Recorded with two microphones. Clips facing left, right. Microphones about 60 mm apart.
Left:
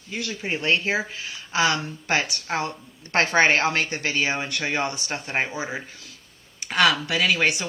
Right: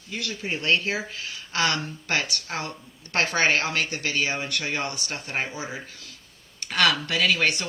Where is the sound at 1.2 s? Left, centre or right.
Centre.